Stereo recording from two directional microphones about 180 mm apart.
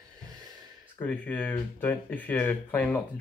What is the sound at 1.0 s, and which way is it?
Speech, 10° left (ahead or behind).